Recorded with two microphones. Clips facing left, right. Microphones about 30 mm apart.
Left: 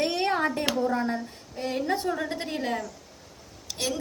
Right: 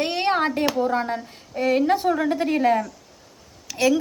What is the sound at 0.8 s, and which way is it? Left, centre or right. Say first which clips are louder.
Speech: right 4 dB; right.